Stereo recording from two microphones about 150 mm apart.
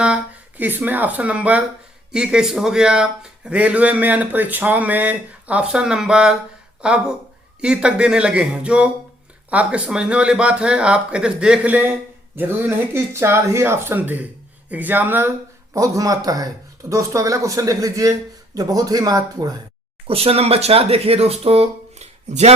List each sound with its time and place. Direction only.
0.0 s a man's voice: 10° right (ahead or behind); by 19.5 s 25° right (ahead or behind)
20.1 s speech: 40° right (ahead or behind)